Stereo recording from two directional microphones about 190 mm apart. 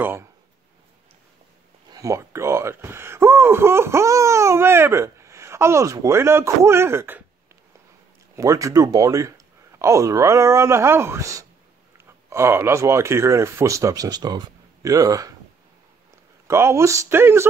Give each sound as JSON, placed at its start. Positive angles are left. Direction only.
{"t": 0.0, "sound": "speech", "side_deg": -10}
{"t": 1.9, "sound": "speech", "side_deg": -15}
{"t": 8.4, "sound": "speech", "side_deg": -15}
{"t": 16.4, "sound": "speech", "side_deg": -15}